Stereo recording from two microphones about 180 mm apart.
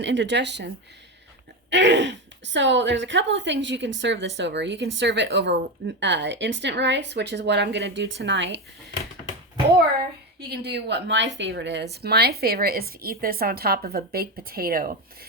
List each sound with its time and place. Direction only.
0.0 s a woman's voice: 80° right
1.7 s a woman's voice: 80° right
4.4 s a woman's voice: 75° right (ahead or behind)
10.5 s a woman's voice: 65° right (ahead or behind)